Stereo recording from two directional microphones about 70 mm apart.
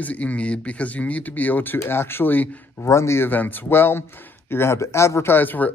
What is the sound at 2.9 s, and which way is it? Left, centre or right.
Speech, left.